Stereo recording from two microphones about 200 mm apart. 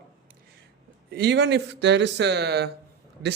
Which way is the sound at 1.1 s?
55° right (ahead or behind).